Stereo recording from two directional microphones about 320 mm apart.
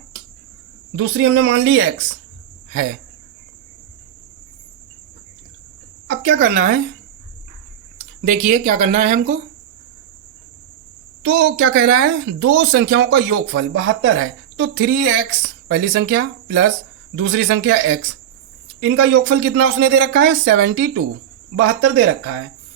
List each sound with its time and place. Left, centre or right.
0.9 s speech: right
6.1 s a woman's voice: right
8.2 s speech: right
11.2 s speech: right